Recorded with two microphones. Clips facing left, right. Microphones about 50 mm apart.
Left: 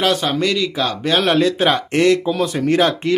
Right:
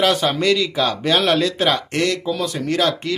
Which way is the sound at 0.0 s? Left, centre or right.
Centre.